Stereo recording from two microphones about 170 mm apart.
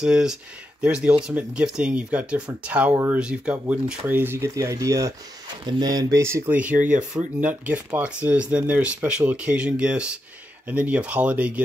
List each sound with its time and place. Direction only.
0.0 s speech: 5° right (ahead or behind)